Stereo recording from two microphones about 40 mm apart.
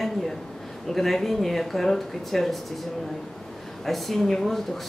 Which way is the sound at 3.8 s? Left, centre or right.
Centre.